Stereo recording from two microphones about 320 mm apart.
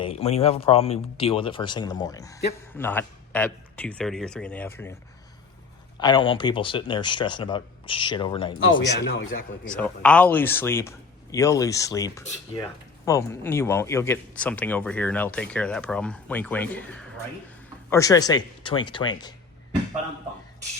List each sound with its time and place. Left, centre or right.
0.0 s speech: centre
6.0 s speech: centre
8.5 s speech: left
9.7 s speech: centre